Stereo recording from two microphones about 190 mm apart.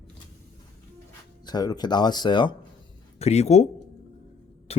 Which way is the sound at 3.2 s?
35° left (ahead or behind).